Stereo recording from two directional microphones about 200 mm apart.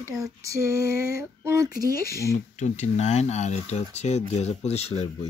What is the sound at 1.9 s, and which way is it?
Speech, 50° left (ahead or behind).